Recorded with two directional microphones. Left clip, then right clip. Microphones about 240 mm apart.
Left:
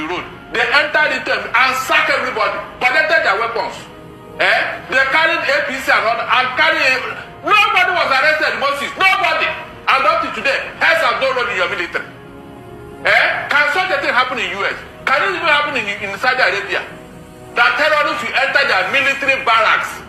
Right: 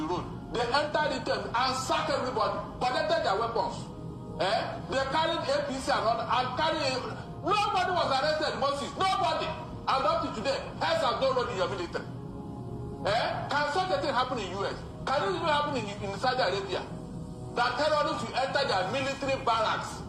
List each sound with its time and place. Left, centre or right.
0.0 s music: left
1.3 s a man's voice: left